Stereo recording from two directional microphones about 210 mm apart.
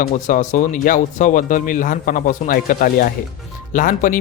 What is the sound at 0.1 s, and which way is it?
Speech, 35° left (ahead or behind).